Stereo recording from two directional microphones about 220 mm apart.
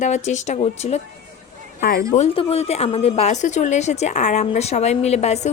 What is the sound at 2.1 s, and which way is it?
A woman's voice, 25° left (ahead or behind).